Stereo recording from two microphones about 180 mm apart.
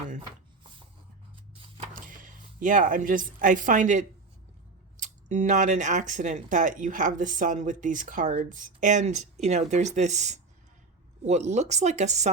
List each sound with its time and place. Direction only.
1.9 s speech: 45° right (ahead or behind)